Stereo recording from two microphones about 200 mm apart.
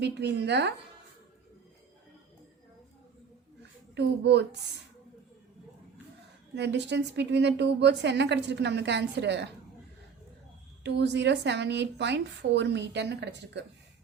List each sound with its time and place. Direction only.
0.0 s a woman's voice: 55° right (ahead or behind)
3.9 s a woman's voice: 60° right (ahead or behind)
6.5 s a woman's voice: 60° right (ahead or behind)
10.8 s a woman's voice: 60° right (ahead or behind)